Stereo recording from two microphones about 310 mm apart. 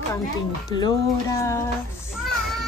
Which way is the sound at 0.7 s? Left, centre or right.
Centre.